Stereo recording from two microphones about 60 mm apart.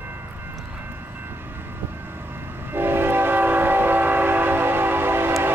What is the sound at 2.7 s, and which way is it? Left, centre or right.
Train, right.